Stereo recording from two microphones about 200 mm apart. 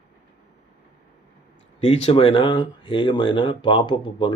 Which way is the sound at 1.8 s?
30° left (ahead or behind).